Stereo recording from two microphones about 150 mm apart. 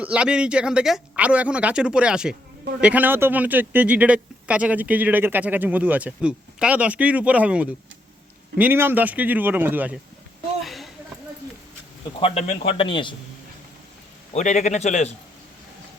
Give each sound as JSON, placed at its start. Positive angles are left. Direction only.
{"t": 0.0, "sound": "speech", "side_deg": -5}
{"t": 10.6, "sound": "a sound", "side_deg": 0}
{"t": 12.2, "sound": "a man's voice", "side_deg": 40}
{"t": 14.3, "sound": "a man's voice", "side_deg": 55}